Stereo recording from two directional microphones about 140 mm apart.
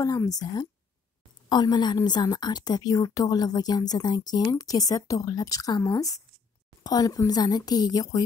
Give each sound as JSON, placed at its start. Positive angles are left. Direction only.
{"t": 0.0, "sound": "a woman's voice", "side_deg": 25}